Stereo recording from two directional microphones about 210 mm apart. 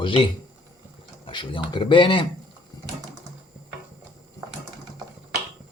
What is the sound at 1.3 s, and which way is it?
Speech, 20° left (ahead or behind).